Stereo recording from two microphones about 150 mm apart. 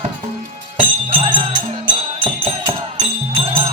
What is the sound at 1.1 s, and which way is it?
Music, 40° right (ahead or behind).